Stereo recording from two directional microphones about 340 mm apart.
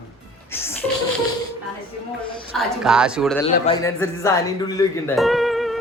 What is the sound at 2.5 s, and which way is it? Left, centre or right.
Speech, centre.